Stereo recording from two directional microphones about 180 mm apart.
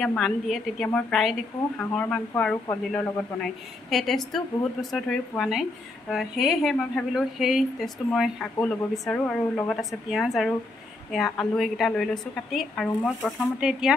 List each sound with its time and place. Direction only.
0.0 s a woman's voice: 5° left (ahead or behind)